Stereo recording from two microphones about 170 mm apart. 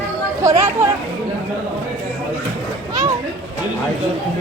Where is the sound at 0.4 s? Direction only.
20° right (ahead or behind).